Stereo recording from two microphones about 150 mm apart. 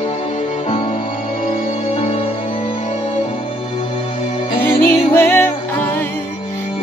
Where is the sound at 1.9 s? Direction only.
45° left (ahead or behind).